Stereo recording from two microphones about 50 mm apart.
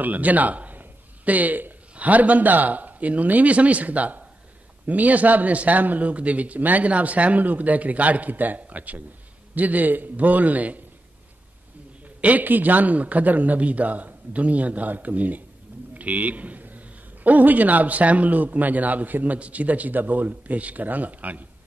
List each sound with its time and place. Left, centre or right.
0.0 s a man's voice: right
12.2 s a man's voice: right